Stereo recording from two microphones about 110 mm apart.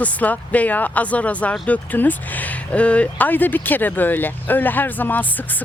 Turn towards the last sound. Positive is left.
turn(degrees=15)  # may be behind; listen again after turning